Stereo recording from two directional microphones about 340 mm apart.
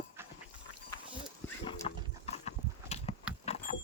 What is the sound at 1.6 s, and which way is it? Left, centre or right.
Horse, centre.